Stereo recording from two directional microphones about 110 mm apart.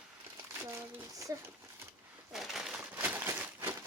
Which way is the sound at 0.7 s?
25° right (ahead or behind).